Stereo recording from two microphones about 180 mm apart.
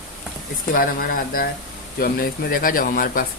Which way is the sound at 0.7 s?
55° left (ahead or behind).